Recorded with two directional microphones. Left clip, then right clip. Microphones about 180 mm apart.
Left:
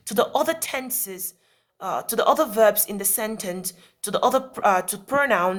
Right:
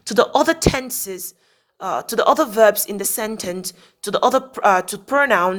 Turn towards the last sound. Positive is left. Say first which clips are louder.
# right 4 dB
turn(degrees=-30)  # may be behind; listen again after turning